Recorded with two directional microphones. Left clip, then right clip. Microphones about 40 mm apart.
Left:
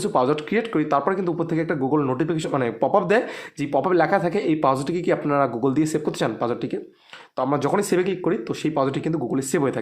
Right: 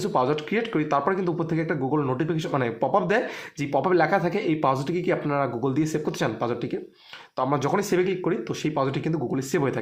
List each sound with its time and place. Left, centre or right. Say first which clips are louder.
0.0 s speech: left 3 dB; left
0.6 s speech: left 2 dB; left
1.9 s speech: left 4 dB; left
2.2 s speech: left 3 dB; left
2.6 s speech: left 4 dB; left
3.6 s speech: left 2 dB; centre
4.0 s speech: left 2 dB; left
4.7 s speech: left 3 dB; left
5.3 s speech: left 4 dB; left
6.1 s speech: left 3 dB; left